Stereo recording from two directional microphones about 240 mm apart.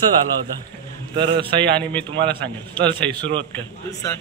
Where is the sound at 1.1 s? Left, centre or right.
Right.